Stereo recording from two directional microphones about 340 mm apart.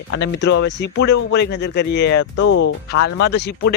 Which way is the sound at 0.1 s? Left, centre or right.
Left.